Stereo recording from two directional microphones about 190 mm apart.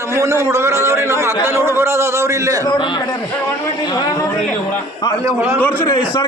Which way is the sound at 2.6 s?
25° left (ahead or behind).